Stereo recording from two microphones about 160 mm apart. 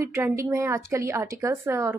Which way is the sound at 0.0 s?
15° right (ahead or behind).